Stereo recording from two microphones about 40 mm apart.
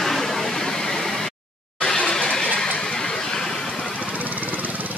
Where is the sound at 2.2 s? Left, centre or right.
Left.